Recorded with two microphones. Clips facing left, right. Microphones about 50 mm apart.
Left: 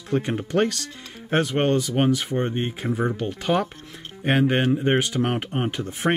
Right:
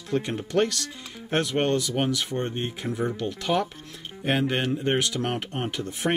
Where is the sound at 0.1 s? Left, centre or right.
Centre.